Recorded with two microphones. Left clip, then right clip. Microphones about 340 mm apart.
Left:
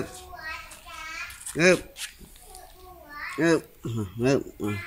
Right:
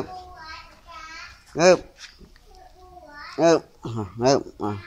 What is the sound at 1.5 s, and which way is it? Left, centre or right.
Speech, centre.